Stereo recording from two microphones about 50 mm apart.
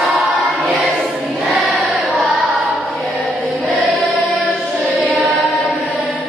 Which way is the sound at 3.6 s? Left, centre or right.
Centre.